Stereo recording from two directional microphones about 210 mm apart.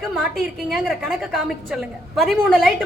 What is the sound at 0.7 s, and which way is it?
A woman's voice, centre (ahead or behind).